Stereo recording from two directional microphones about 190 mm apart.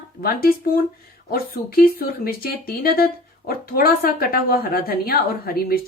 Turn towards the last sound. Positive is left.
turn(degrees=50)  # may be behind; listen again after turning